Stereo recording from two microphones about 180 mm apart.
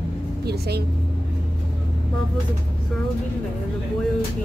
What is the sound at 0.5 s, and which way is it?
Speech, 65° right (ahead or behind).